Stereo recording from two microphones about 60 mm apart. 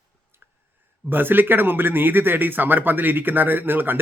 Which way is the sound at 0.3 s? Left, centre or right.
Right.